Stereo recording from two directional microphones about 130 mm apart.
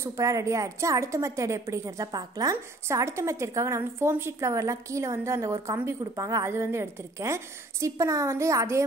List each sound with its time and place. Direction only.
0.0 s a woman's voice: 25° right (ahead or behind)